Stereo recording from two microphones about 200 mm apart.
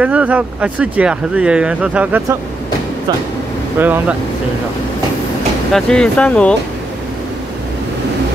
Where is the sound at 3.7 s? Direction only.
10° right (ahead or behind).